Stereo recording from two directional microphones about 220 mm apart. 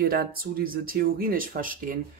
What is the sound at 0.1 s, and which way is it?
Speech, 40° right (ahead or behind).